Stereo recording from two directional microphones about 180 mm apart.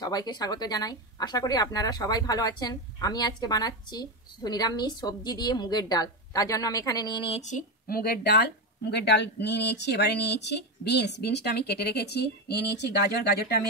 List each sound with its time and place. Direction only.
0.0 s speech: 20° left (ahead or behind); by 13.5 s 65° left (ahead or behind)